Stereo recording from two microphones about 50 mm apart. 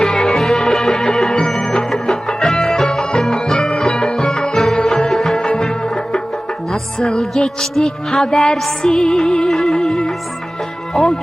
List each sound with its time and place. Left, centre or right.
0.0 s music: centre